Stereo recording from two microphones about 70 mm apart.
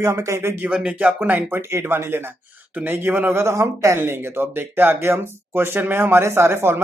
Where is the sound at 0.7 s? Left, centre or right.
Centre.